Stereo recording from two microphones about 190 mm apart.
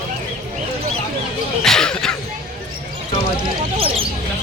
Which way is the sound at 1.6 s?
5° left (ahead or behind).